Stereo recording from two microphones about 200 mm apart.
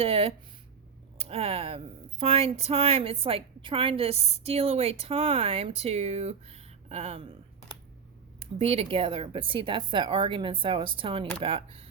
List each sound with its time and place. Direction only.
0.0 s speech: 30° right (ahead or behind)
8.4 s speech: 30° right (ahead or behind)